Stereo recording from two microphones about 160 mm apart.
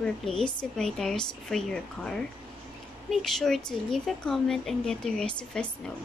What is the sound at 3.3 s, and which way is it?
A woman's voice, centre (ahead or behind).